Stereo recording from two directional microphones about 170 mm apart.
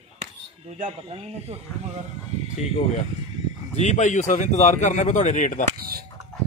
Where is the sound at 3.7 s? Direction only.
40° left (ahead or behind).